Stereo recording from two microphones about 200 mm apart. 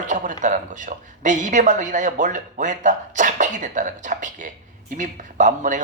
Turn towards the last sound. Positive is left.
turn(degrees=-40)  # may be behind; listen again after turning